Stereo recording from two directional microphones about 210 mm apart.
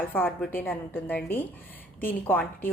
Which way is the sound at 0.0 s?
10° left (ahead or behind).